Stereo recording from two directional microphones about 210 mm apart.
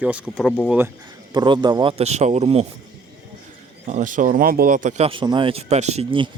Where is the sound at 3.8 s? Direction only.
35° right (ahead or behind).